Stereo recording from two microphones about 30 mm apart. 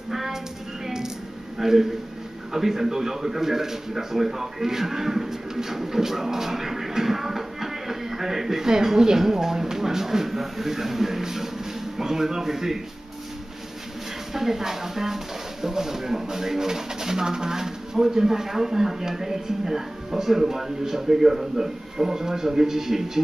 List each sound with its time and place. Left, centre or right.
0.1 s a sound: centre
1.6 s a man's voice: centre
14.3 s a man's voice: centre